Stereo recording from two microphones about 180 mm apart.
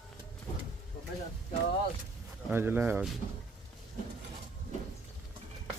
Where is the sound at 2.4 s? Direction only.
10° right (ahead or behind).